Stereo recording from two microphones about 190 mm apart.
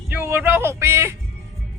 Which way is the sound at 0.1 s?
10° right (ahead or behind).